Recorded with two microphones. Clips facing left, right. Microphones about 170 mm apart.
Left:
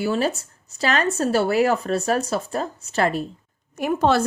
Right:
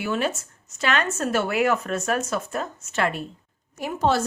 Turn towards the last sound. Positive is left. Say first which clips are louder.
# left 4 dB
turn(degrees=60)  # may be behind; listen again after turning